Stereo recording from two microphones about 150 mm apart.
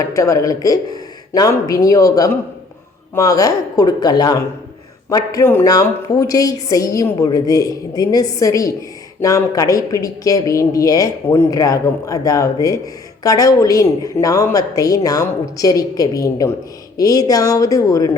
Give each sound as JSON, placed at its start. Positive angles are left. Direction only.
{"t": 0.0, "sound": "speech", "side_deg": 20}